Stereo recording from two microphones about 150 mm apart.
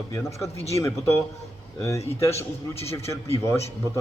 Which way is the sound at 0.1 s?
20° left (ahead or behind).